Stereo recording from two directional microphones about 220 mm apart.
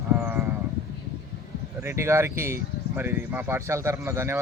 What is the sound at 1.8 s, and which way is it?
Speech, 10° right (ahead or behind).